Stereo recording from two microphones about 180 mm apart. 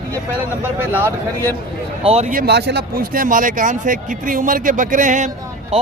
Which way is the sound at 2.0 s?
35° right (ahead or behind).